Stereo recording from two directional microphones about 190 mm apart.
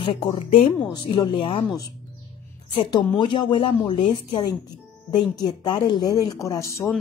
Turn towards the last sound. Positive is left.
turn(degrees=15)  # may be behind; listen again after turning